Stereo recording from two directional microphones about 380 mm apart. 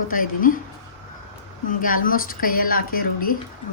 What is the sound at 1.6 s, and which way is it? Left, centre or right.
A woman's voice, left.